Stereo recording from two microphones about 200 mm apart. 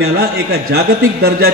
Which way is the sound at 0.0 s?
55° right (ahead or behind).